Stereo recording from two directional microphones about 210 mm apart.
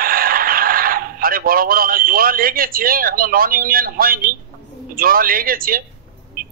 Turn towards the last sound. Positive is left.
turn(degrees=-45)  # may be behind; listen again after turning